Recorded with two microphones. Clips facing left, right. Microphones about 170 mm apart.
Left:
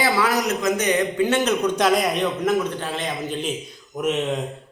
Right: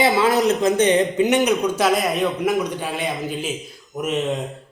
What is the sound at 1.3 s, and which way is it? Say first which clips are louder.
A man's voice: right 2 dB; 15° right (ahead or behind).